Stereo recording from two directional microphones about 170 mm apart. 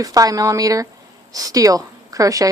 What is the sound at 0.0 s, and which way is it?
Speech, 20° right (ahead or behind).